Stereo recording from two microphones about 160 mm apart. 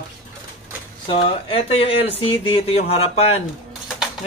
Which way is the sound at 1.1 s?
35° left (ahead or behind).